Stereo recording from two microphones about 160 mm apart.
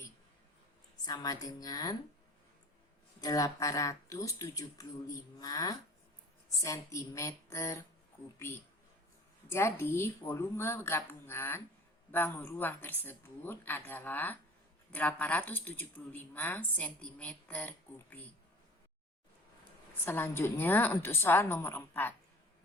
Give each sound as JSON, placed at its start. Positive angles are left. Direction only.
{"t": 1.0, "sound": "speech", "side_deg": 25}
{"t": 3.2, "sound": "speech", "side_deg": 20}
{"t": 9.5, "sound": "a woman's voice", "side_deg": 15}
{"t": 20.1, "sound": "a woman's voice", "side_deg": 15}